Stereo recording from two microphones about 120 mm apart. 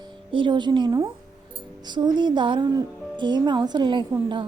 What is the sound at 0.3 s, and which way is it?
A woman's voice, 45° right (ahead or behind).